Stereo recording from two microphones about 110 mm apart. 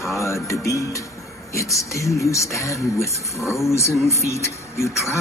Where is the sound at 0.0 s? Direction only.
30° left (ahead or behind).